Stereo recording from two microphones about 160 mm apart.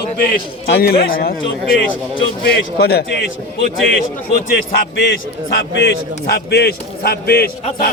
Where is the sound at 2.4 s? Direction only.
90° left.